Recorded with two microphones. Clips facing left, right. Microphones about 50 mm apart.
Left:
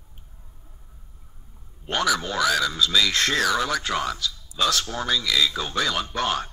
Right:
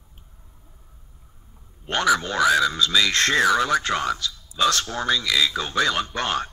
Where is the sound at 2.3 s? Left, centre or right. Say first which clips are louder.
Right 4 dB; centre.